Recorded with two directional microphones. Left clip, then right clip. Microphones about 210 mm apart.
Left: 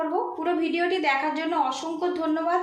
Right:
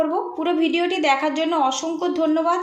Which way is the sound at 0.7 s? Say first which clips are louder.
Right 4 dB; 35° right (ahead or behind).